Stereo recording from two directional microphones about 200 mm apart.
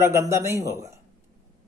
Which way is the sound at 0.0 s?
15° right (ahead or behind).